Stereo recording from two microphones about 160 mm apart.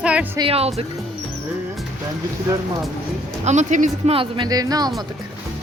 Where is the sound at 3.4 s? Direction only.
50° right (ahead or behind).